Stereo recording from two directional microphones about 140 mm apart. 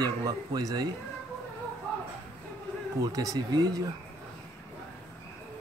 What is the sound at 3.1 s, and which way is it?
Speech, 25° right (ahead or behind).